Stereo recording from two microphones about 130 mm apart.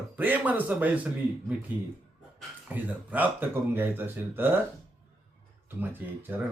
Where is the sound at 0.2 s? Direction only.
15° right (ahead or behind).